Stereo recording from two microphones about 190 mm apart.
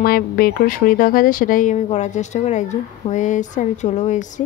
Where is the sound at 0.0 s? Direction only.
50° left (ahead or behind).